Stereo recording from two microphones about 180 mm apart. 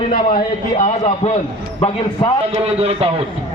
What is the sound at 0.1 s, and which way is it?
A man's voice, 55° left (ahead or behind).